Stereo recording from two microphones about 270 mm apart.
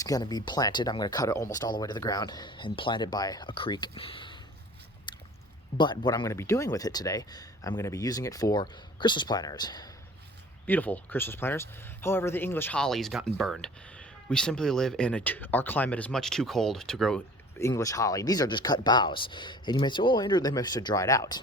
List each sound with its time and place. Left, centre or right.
0.0 s speech: centre
5.1 s squish: centre
5.7 s speech: centre